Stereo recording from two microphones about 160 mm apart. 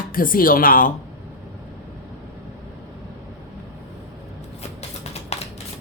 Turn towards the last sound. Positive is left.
turn(degrees=40)  # may be behind; listen again after turning